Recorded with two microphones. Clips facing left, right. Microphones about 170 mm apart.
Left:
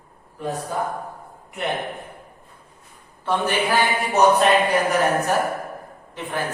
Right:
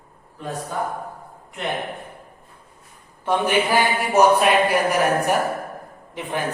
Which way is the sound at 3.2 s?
15° right (ahead or behind).